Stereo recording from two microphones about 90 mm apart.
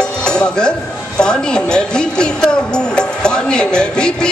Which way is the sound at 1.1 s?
10° left (ahead or behind).